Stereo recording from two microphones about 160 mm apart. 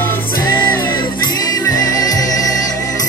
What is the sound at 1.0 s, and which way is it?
Music, 25° left (ahead or behind).